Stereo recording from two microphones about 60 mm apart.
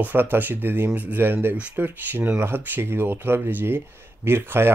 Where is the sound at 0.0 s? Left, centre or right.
Right.